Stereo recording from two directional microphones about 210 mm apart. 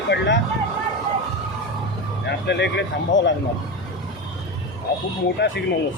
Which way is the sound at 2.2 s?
55° left (ahead or behind).